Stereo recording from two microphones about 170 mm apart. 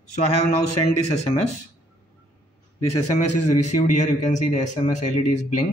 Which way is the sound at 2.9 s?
45° left (ahead or behind).